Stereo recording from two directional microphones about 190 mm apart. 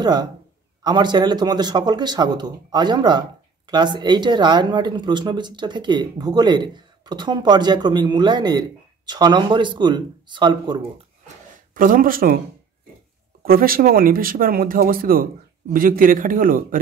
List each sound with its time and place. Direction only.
0.0 s speech: 20° right (ahead or behind)
11.7 s speech: 45° right (ahead or behind)
13.4 s speech: 50° right (ahead or behind)